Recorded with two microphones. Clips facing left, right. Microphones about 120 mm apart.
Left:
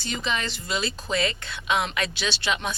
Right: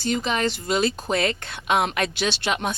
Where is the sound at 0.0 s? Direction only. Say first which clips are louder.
Right 6 dB; 45° right (ahead or behind).